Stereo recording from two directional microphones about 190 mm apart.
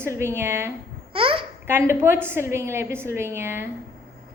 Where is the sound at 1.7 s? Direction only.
15° right (ahead or behind).